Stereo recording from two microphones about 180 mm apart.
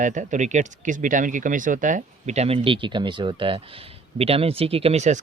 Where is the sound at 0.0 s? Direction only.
45° right (ahead or behind).